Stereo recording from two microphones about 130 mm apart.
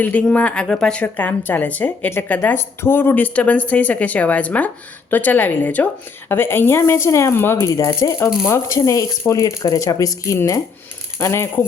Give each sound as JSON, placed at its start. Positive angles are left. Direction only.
{"t": 0.0, "sound": "a woman's voice", "side_deg": 10}